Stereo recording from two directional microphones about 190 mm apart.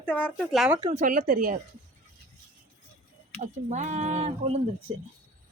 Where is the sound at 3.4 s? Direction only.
40° right (ahead or behind).